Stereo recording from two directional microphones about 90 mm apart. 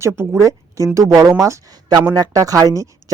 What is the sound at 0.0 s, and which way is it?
A woman's voice, 30° right (ahead or behind).